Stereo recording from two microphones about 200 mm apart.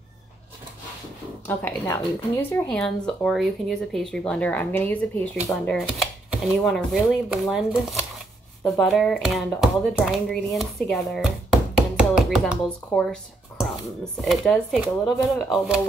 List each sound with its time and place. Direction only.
1.5 s speech: 10° left (ahead or behind)
11.7 s a sound: 5° right (ahead or behind)
12.6 s speech: 5° left (ahead or behind)